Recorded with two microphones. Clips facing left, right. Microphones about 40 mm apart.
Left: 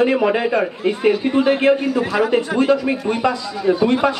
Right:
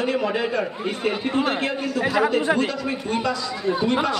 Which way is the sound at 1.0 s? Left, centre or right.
Centre.